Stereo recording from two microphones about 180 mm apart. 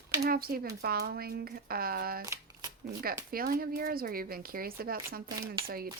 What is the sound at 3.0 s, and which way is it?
Speech, 55° right (ahead or behind).